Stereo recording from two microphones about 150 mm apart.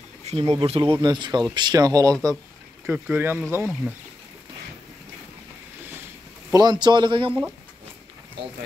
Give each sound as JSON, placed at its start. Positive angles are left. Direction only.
{"t": 0.2, "sound": "speech", "side_deg": -45}
{"t": 2.9, "sound": "speech", "side_deg": -10}
{"t": 6.5, "sound": "a man's voice", "side_deg": -30}